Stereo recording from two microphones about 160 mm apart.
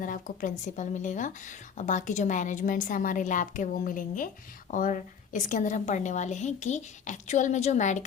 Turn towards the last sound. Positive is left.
turn(degrees=50)  # may be behind; listen again after turning